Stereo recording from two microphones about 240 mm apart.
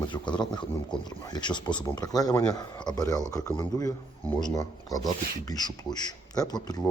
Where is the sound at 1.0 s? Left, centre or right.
Centre.